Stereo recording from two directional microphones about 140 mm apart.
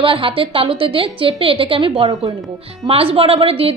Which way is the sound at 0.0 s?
40° right (ahead or behind).